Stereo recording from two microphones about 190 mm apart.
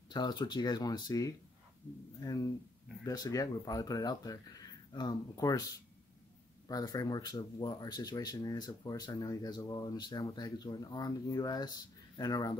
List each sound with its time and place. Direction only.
0.1 s speech: 20° left (ahead or behind)
6.7 s speech: 20° left (ahead or behind)